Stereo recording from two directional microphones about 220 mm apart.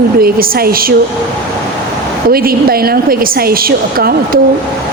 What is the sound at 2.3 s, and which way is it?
A woman's voice, 40° right (ahead or behind).